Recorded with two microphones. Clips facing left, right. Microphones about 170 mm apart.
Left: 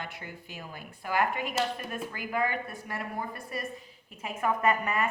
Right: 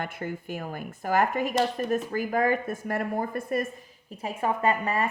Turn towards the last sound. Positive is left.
turn(degrees=-35)  # may be behind; listen again after turning